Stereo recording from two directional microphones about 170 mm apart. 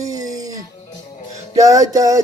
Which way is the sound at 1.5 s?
20° right (ahead or behind).